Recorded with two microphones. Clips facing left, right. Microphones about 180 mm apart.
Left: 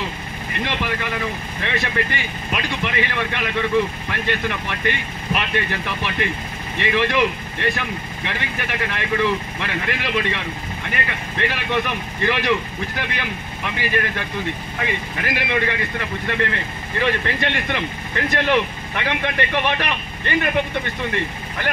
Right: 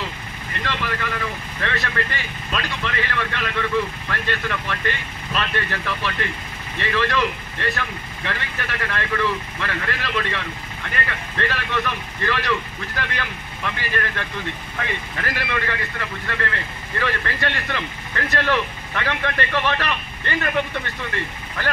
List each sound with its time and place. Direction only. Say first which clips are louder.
0.5 s a man's voice: left 2 dB; 15° left (ahead or behind)